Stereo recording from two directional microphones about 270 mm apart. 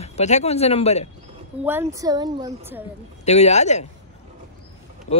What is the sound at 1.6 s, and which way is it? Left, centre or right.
A woman's voice, centre.